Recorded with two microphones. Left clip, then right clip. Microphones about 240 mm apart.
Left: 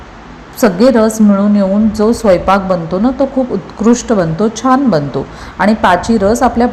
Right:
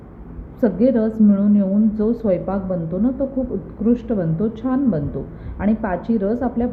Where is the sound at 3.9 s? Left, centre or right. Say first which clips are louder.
Left 10 dB; centre.